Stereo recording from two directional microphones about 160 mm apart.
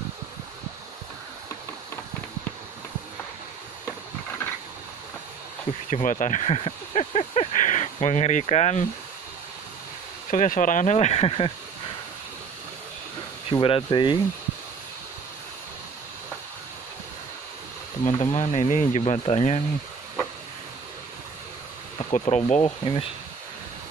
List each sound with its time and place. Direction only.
5.7 s speech: 45° left (ahead or behind)
10.3 s speech: 55° left (ahead or behind); by 11.5 s 35° left (ahead or behind)
13.5 s speech: 35° left (ahead or behind)
18.0 s speech: 45° left (ahead or behind)
22.3 s speech: 40° left (ahead or behind)